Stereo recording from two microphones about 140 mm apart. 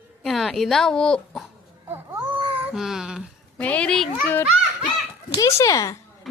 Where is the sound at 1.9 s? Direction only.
15° right (ahead or behind).